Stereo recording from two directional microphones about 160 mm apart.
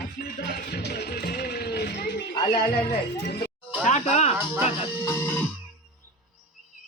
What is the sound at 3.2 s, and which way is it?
Speech, 90° left.